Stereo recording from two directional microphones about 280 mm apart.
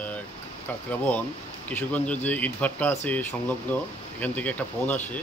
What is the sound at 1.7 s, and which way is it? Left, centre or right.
Speech, centre.